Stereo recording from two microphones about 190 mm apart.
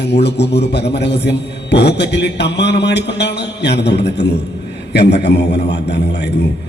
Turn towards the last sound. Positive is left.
turn(degrees=60)  # may be behind; listen again after turning